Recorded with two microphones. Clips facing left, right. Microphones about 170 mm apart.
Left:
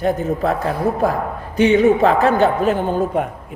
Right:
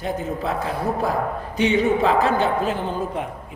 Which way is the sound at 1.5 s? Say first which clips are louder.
Left 6 dB; 55° left (ahead or behind).